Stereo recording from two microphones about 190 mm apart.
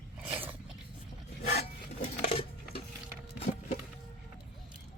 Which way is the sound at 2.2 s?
35° left (ahead or behind).